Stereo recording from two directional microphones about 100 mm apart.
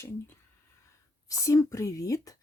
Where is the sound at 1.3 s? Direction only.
30° left (ahead or behind).